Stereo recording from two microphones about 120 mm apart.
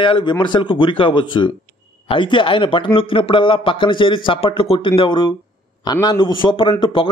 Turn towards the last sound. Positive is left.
turn(degrees=45)  # may be behind; listen again after turning